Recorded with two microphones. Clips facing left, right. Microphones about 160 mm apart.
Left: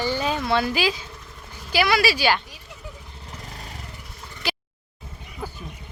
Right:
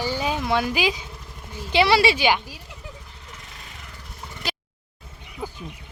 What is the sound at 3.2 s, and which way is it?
Vehicle, 35° left (ahead or behind).